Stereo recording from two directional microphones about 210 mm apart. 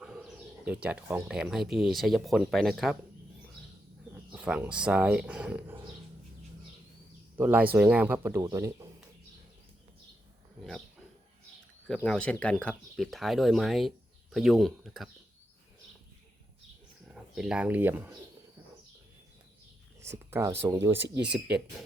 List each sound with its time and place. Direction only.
0.0 s a sound: centre (ahead or behind)
1.0 s speech: 5° right (ahead or behind)
4.3 s speech: 5° right (ahead or behind)
7.3 s speech: 10° right (ahead or behind)
10.6 s a sound: centre (ahead or behind)
11.9 s speech: 5° left (ahead or behind)
17.1 s speech: 5° right (ahead or behind)
20.1 s speech: 10° right (ahead or behind)
21.0 s speech: 55° right (ahead or behind)